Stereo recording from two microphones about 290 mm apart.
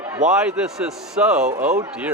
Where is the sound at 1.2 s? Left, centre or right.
Centre.